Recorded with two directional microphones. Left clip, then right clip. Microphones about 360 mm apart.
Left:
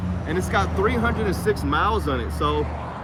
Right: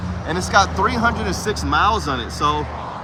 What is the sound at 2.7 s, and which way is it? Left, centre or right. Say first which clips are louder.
Vehicle: right 4 dB; right.